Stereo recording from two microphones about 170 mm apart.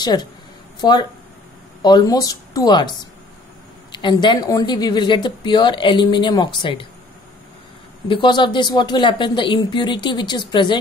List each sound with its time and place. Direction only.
0.0 s a woman's voice: 25° left (ahead or behind)
8.1 s a woman's voice: 30° left (ahead or behind)